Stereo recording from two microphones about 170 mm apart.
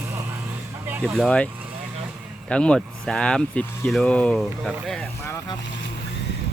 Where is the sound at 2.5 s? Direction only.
5° left (ahead or behind).